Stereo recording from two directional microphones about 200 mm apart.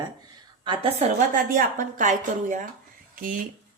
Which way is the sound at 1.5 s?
40° right (ahead or behind).